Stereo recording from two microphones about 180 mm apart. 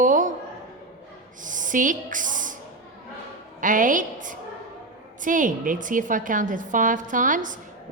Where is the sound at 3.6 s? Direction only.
45° right (ahead or behind).